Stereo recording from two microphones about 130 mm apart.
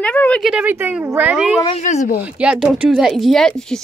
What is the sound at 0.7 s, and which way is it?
Speech, 20° right (ahead or behind).